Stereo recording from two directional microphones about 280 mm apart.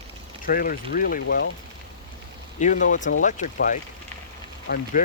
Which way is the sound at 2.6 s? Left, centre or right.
Left.